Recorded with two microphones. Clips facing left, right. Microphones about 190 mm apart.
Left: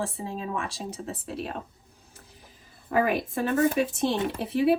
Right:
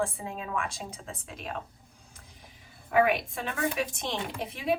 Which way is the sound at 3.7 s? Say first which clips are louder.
Left 7 dB; 35° left (ahead or behind).